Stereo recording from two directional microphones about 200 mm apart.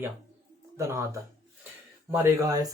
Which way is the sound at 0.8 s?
15° right (ahead or behind).